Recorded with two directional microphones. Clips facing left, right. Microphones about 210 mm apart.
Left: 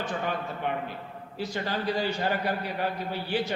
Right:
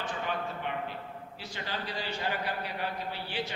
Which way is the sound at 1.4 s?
45° left (ahead or behind).